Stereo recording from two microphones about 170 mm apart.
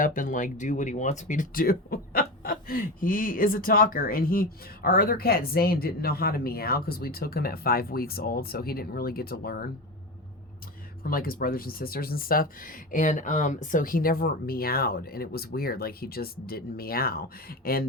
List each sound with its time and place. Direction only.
0.0 s speech: 50° left (ahead or behind)
11.0 s speech: 60° left (ahead or behind)